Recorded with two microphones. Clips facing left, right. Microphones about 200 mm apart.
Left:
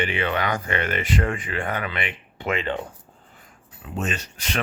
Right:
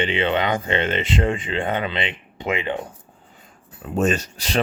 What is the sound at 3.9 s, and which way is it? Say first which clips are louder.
Speech: right 9 dB; 40° right (ahead or behind).